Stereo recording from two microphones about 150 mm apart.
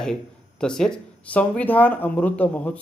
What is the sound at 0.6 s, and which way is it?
A man's voice, 5° left (ahead or behind).